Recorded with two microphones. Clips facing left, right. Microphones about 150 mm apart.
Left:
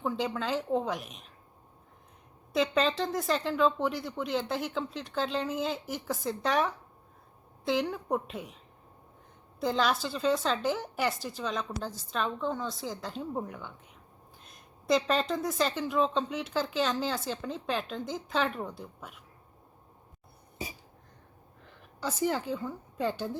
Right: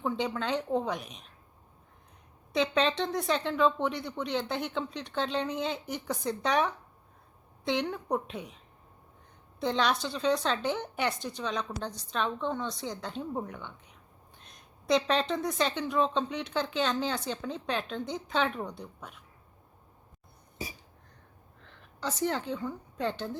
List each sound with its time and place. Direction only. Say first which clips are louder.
0.0 s a woman's voice: even; centre (ahead or behind)
2.5 s a woman's voice: even; centre (ahead or behind)
9.6 s a woman's voice: even; 5° left (ahead or behind)
21.6 s a woman's voice: even; 10° left (ahead or behind)